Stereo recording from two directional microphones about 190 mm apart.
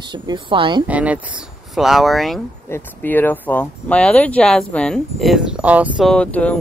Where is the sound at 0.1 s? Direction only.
25° right (ahead or behind).